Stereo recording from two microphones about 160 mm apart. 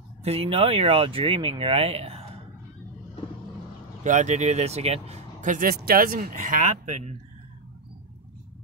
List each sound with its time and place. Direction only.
0.2 s speech: 40° right (ahead or behind)
4.0 s speech: 50° right (ahead or behind)